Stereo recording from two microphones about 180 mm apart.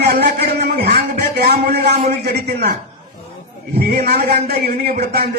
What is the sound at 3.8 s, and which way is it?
A man's voice, 60° right (ahead or behind).